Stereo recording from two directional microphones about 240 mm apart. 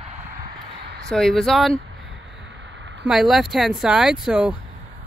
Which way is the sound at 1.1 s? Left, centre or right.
Centre.